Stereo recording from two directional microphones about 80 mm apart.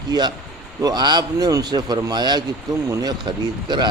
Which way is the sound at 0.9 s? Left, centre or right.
Right.